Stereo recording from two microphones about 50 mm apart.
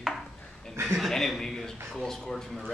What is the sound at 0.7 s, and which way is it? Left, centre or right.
Speech, right.